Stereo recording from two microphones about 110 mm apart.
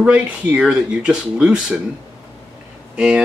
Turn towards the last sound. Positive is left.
turn(degrees=-10)  # may be behind; listen again after turning